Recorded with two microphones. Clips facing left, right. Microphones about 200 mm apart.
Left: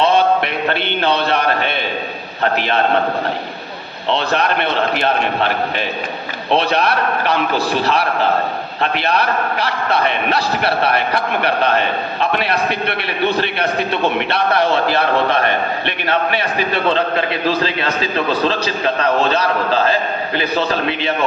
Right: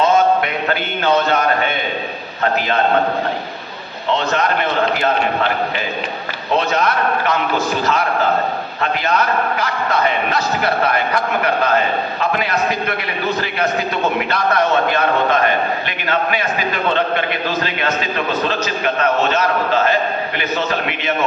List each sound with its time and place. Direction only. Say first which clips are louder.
7.3 s a man's voice: left 1 dB; 30° left (ahead or behind)
14.0 s a man's voice: even; 30° left (ahead or behind)
16.7 s a man's voice: left 2 dB; 30° left (ahead or behind)